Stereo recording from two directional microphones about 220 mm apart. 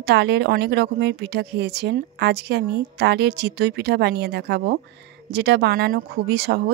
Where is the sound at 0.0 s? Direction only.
50° right (ahead or behind).